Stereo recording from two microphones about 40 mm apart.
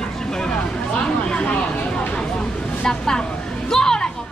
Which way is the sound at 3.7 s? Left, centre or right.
Centre.